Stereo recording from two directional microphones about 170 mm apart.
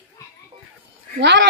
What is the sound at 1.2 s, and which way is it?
Speech, 90° right.